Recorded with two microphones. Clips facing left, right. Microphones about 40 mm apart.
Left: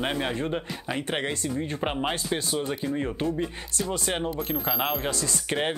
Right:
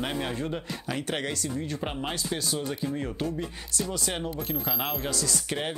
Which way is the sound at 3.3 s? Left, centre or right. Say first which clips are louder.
Left 4 dB; left.